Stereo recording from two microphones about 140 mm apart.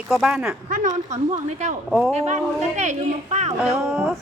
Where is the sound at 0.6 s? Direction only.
65° right (ahead or behind).